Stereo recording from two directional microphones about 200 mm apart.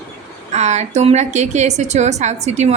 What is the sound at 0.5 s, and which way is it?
A woman's voice, 35° right (ahead or behind).